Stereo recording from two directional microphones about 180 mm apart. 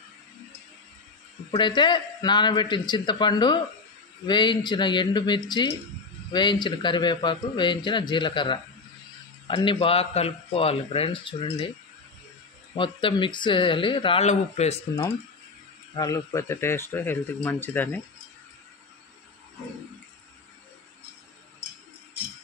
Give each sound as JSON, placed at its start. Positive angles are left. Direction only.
{"t": 1.5, "sound": "a man's voice", "side_deg": 25}
{"t": 12.7, "sound": "a man's voice", "side_deg": 30}
{"t": 16.0, "sound": "speech", "side_deg": 15}